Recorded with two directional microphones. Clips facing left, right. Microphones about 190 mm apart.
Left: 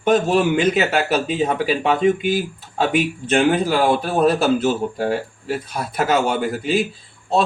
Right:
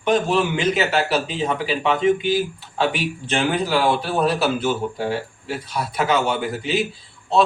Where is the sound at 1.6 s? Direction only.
45° left (ahead or behind).